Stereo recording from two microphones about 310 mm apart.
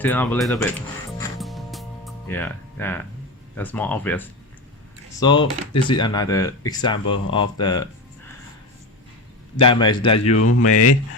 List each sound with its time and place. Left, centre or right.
0.0 s speech: centre
1.4 s music: centre
3.5 s speech: centre
9.6 s speech: centre
10.3 s speech: left